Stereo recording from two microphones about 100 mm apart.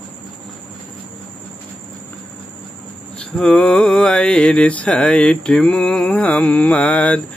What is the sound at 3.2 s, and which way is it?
Mantra, 5° left (ahead or behind).